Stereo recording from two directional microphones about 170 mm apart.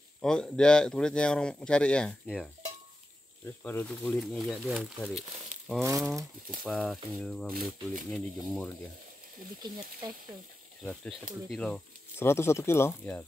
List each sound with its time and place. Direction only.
0.2 s speech: 5° left (ahead or behind)
3.6 s speech: 10° left (ahead or behind)
5.8 s speech: 20° right (ahead or behind)
6.6 s speech: centre (ahead or behind)
10.0 s speech: 25° right (ahead or behind)
10.8 s speech: 5° left (ahead or behind)